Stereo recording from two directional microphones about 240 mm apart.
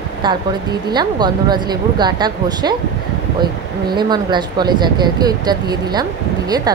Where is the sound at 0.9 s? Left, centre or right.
Centre.